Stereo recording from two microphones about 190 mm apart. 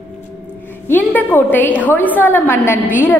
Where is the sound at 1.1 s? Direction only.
10° left (ahead or behind).